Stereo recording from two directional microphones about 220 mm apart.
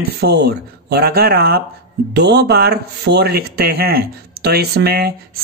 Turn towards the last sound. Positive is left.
turn(degrees=-45)  # may be behind; listen again after turning